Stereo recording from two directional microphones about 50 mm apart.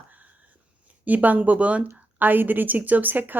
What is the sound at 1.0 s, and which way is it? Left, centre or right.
Speech, right.